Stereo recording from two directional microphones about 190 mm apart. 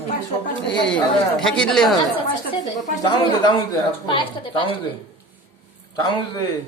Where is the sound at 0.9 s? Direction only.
5° left (ahead or behind).